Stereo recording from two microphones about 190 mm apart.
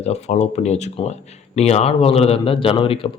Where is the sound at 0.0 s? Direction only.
35° left (ahead or behind).